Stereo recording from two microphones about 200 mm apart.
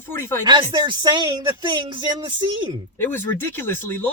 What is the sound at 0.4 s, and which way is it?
Speech, 20° right (ahead or behind).